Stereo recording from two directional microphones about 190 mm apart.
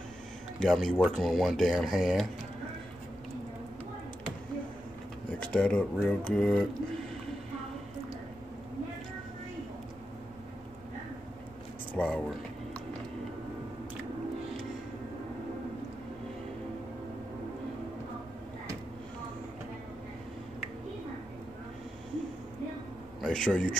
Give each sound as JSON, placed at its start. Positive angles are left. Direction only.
{"t": 0.6, "sound": "speech", "side_deg": 0}
{"t": 5.4, "sound": "speech", "side_deg": 5}
{"t": 12.0, "sound": "a sound", "side_deg": 5}
{"t": 23.2, "sound": "speech", "side_deg": 5}